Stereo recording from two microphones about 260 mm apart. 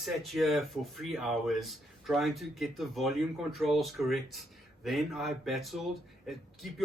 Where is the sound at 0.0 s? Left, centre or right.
Centre.